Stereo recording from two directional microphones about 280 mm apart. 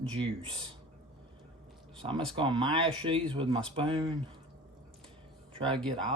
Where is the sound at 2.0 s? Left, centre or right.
Centre.